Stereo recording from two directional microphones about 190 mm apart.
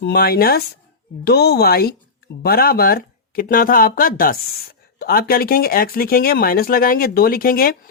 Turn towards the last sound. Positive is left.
turn(degrees=50)  # may be behind; listen again after turning